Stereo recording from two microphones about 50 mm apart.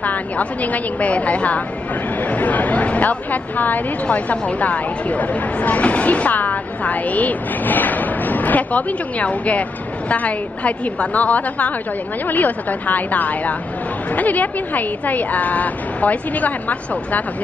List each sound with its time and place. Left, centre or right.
0.0 s a woman's voice: left